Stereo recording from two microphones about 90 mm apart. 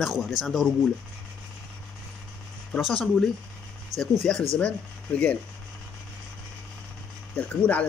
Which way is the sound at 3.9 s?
40° right (ahead or behind).